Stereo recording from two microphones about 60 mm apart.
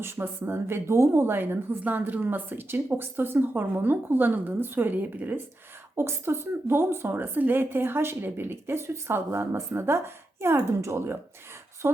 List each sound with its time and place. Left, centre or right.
0.0 s a woman's voice: right
1.8 s speech: right
6.0 s a woman's voice: right